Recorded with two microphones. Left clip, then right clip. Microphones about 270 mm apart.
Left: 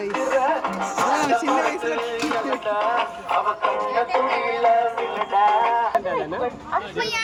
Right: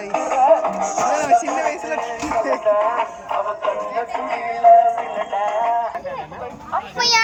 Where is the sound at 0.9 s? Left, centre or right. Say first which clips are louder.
Right 3 dB; centre.